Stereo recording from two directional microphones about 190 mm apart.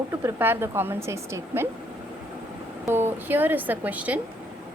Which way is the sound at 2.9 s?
10° right (ahead or behind).